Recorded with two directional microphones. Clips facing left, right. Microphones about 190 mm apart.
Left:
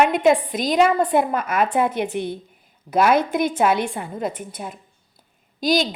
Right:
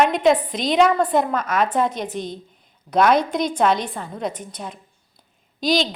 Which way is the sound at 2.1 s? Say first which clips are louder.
Left 3 dB; 60° left (ahead or behind).